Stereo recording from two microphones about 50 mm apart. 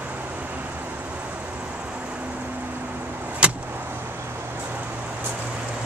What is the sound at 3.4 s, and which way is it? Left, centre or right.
Vehicle, right.